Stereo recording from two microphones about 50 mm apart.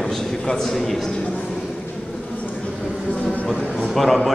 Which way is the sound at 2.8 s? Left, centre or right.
Right.